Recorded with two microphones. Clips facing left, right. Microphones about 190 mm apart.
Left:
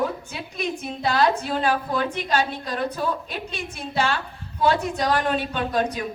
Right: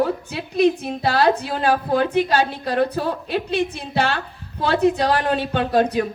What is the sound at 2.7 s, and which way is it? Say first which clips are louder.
A woman's voice: right 5 dB; 60° right (ahead or behind).